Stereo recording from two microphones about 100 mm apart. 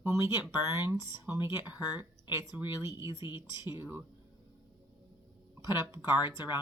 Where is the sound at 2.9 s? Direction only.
35° right (ahead or behind).